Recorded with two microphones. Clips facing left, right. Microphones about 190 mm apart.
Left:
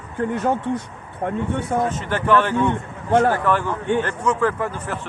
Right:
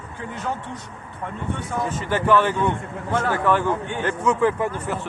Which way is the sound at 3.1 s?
55° left (ahead or behind).